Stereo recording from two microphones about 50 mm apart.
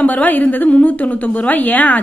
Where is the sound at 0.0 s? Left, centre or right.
Left.